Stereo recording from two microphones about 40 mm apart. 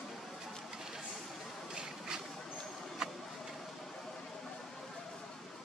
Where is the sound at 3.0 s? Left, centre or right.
Centre.